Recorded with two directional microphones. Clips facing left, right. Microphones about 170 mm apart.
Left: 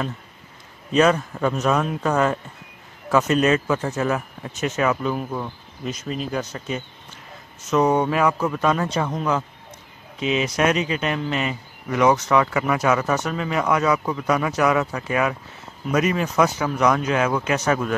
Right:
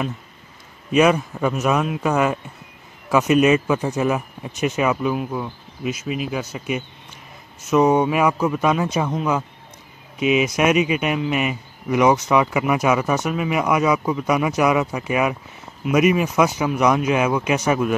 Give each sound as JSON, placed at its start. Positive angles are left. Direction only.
{"t": 0.9, "sound": "speech", "side_deg": -10}